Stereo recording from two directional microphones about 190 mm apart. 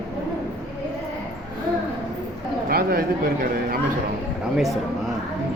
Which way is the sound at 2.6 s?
50° right (ahead or behind).